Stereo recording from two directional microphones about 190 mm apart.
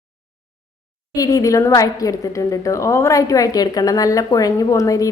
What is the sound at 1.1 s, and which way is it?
A woman's voice, 20° left (ahead or behind).